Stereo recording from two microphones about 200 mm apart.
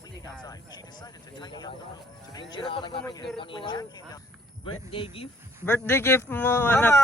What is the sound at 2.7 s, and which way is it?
Speech, 25° left (ahead or behind).